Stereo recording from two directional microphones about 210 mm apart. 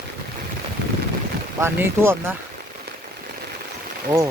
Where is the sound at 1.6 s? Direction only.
10° right (ahead or behind).